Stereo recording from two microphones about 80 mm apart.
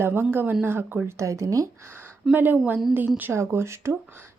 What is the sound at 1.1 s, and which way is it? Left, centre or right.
Speech, right.